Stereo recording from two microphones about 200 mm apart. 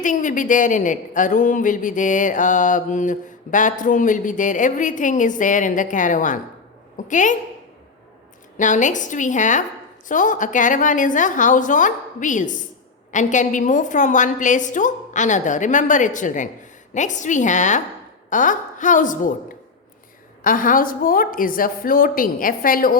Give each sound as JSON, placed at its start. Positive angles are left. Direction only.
{"t": 0.0, "sound": "a woman's voice", "side_deg": 40}
{"t": 8.5, "sound": "a woman's voice", "side_deg": 40}